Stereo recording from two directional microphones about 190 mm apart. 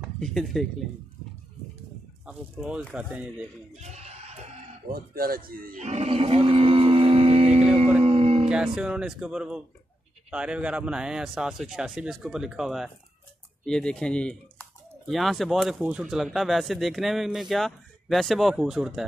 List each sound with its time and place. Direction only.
0.0 s speech: centre (ahead or behind)
2.2 s speech: 5° right (ahead or behind)
3.8 s a sound: 35° right (ahead or behind)
4.9 s speech: 50° right (ahead or behind); by 7.6 s 35° right (ahead or behind)
8.0 s music: 30° right (ahead or behind)
8.5 s speech: 5° right (ahead or behind)